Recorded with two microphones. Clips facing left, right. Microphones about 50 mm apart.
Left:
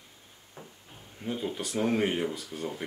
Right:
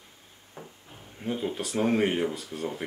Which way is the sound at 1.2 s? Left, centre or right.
Centre.